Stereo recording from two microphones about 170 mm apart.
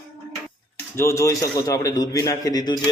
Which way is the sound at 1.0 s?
15° left (ahead or behind).